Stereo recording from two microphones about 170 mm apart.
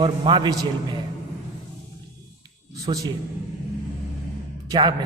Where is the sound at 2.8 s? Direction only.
20° right (ahead or behind).